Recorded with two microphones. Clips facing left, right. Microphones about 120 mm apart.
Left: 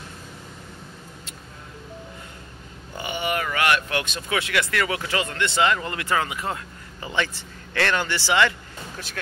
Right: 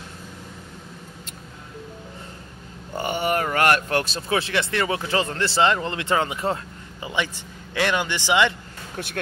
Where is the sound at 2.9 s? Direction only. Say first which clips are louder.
Right 4 dB; 45° right (ahead or behind); by 6.6 s 30° right (ahead or behind).